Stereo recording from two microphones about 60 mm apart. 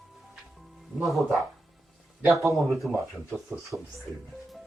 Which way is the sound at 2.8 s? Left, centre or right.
Left.